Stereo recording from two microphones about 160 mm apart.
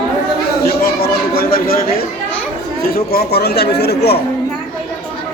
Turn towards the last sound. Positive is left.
turn(degrees=90)